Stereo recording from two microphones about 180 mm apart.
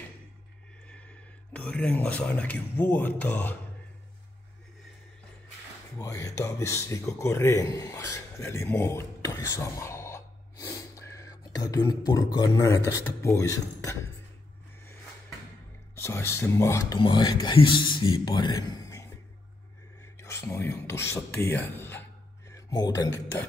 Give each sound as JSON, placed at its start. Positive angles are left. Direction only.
{"t": 1.5, "sound": "speech", "side_deg": 5}
{"t": 5.9, "sound": "speech", "side_deg": 20}
{"t": 16.0, "sound": "speech", "side_deg": 15}
{"t": 20.2, "sound": "speech", "side_deg": 15}